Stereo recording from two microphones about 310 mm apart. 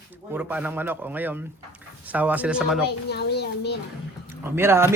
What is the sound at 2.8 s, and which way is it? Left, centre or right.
Speech, left.